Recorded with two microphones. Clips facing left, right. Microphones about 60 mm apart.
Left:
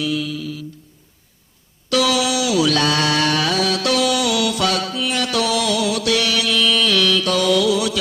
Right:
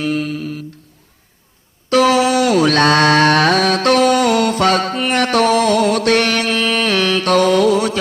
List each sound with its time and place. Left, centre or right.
0.0 s humming: right
1.9 s mantra: right